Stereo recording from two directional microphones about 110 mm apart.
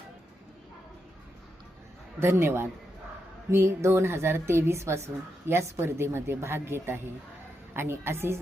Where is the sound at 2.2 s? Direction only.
20° right (ahead or behind).